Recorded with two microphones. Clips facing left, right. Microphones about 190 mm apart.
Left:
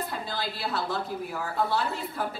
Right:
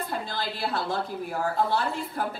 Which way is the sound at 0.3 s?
50° right (ahead or behind).